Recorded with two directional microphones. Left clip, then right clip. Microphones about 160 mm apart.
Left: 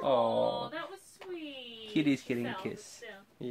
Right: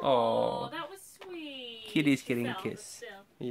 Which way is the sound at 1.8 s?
35° right (ahead or behind).